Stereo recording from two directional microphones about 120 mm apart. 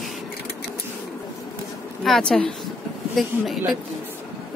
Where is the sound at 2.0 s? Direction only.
5° left (ahead or behind).